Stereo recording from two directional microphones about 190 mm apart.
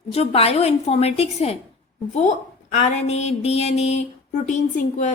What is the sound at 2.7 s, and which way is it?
Speech, 35° left (ahead or behind).